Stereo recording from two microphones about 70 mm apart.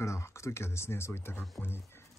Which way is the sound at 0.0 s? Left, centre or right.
Left.